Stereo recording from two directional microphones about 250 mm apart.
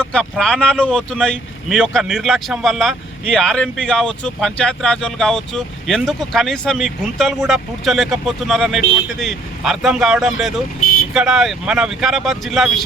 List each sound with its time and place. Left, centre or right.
0.0 s speech: centre
10.8 s vehicle: left
11.1 s speech: centre